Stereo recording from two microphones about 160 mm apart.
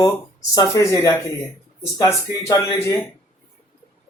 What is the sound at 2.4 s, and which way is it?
Speech, 15° left (ahead or behind).